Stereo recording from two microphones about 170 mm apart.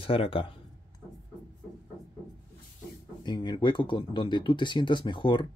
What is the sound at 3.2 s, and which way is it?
Speech, 25° left (ahead or behind).